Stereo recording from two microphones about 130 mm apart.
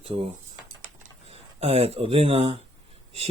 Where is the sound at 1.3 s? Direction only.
50° right (ahead or behind).